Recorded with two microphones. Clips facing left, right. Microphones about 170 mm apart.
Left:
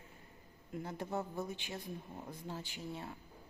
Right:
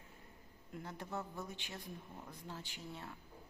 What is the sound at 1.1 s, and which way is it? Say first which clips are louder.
Speech: left 5 dB; 25° left (ahead or behind).